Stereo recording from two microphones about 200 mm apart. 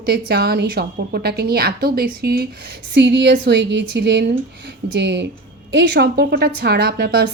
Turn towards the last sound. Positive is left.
turn(degrees=-55)  # may be behind; listen again after turning